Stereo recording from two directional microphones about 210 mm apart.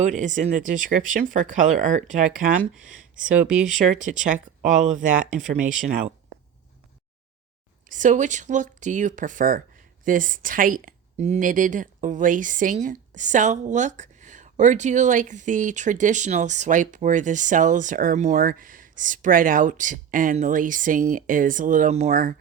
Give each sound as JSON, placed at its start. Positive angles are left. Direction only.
{"t": 0.0, "sound": "a woman's voice", "side_deg": -35}
{"t": 4.1, "sound": "a woman's voice", "side_deg": -45}
{"t": 7.9, "sound": "a woman's voice", "side_deg": -40}